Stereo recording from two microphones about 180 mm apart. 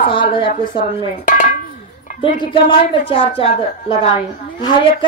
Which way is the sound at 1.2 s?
45° left (ahead or behind).